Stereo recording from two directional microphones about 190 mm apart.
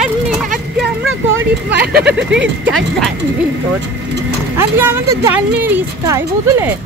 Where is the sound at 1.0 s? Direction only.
90° right.